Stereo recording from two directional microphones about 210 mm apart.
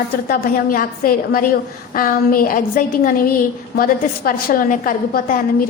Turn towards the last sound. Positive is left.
turn(degrees=40)  # may be behind; listen again after turning